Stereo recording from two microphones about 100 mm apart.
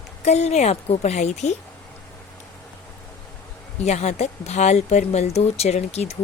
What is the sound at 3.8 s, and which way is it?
Speech, 90° left.